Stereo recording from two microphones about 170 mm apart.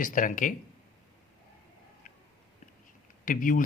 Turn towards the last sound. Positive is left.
turn(degrees=50)  # may be behind; listen again after turning